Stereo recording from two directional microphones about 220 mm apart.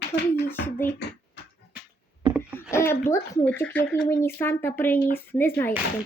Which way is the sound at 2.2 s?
20° right (ahead or behind).